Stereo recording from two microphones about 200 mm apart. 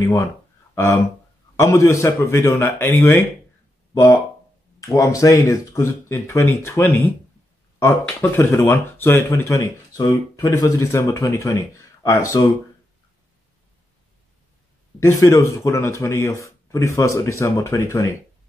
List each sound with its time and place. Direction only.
0.0 s speech: 15° left (ahead or behind)
1.6 s speech: 15° left (ahead or behind)
15.0 s speech: 15° left (ahead or behind)